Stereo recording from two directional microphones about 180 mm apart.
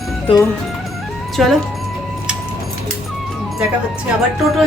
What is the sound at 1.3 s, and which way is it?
Speech, centre (ahead or behind).